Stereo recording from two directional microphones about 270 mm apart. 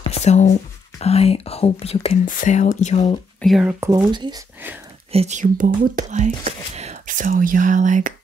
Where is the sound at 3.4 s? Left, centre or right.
Centre.